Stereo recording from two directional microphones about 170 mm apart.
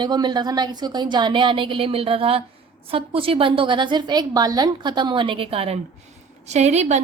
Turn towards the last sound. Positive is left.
turn(degrees=-40)  # may be behind; listen again after turning